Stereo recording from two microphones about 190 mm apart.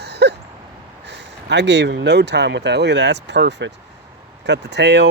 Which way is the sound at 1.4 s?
65° right (ahead or behind).